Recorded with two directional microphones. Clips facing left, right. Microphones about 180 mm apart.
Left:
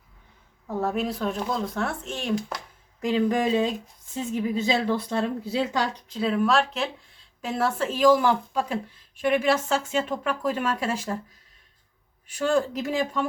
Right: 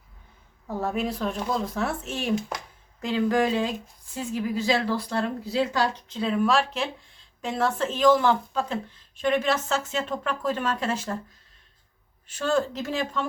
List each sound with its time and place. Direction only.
0.7 s speech: centre (ahead or behind)
3.0 s speech: 15° left (ahead or behind)
6.1 s speech: 5° left (ahead or behind)
12.3 s speech: 15° left (ahead or behind)